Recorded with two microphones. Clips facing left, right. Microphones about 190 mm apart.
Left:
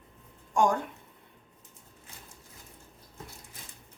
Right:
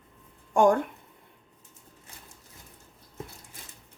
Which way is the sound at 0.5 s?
55° right (ahead or behind).